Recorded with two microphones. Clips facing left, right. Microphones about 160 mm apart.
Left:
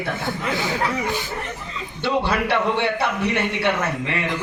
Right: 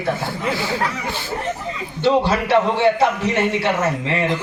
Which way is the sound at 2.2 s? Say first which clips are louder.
Right 4 dB; 60° left (ahead or behind).